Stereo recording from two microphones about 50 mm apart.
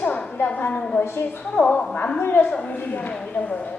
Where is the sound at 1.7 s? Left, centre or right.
Left.